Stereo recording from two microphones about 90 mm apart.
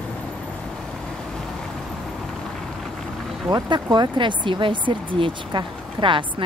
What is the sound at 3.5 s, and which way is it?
Speech, 50° right (ahead or behind).